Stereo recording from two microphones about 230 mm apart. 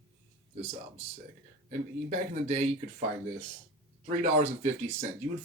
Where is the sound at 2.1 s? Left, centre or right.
Right.